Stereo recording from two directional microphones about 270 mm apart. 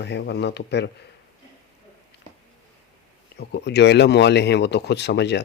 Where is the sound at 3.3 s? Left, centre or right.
Left.